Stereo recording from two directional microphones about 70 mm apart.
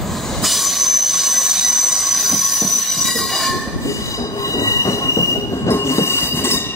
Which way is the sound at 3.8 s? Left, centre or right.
Left.